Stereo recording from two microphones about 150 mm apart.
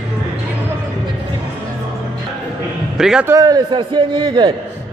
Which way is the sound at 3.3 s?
25° right (ahead or behind).